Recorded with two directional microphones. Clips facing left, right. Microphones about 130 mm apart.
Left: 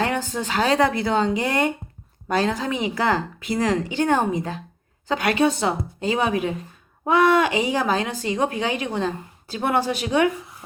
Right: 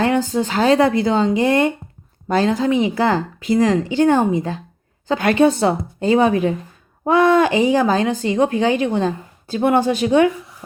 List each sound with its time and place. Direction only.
0.0 s speech: 35° right (ahead or behind)
5.0 s speech: 35° right (ahead or behind)